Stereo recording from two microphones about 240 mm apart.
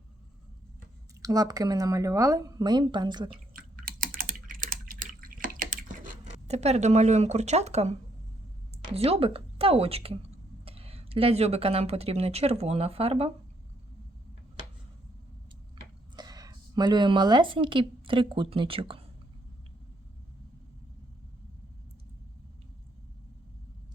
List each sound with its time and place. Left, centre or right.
1.2 s speech: centre
3.8 s typing: right
8.7 s speech: right
16.1 s speech: centre